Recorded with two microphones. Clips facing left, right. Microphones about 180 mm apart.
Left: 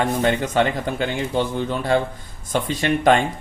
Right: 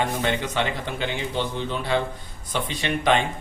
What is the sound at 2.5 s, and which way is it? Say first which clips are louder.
Speech: left 6 dB; 45° left (ahead or behind).